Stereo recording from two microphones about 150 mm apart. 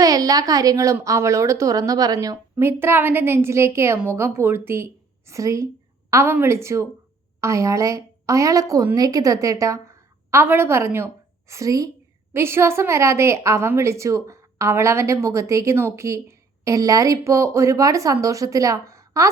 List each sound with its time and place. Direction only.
0.0 s a woman's voice: 25° right (ahead or behind)